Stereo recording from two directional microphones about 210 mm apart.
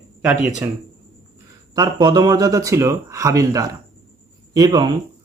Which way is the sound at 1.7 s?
20° right (ahead or behind).